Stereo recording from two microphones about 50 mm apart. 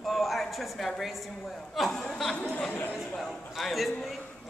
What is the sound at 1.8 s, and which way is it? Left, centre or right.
Speech, centre.